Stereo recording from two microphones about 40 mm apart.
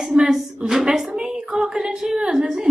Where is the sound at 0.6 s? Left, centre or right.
Centre.